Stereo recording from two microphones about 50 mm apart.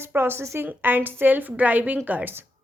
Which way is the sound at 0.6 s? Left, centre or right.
Right.